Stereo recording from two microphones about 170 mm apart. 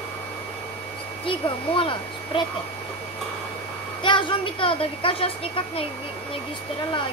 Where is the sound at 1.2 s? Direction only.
30° left (ahead or behind).